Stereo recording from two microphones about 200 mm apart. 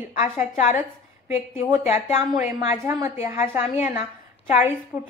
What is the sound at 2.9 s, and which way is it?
Speech, 10° right (ahead or behind).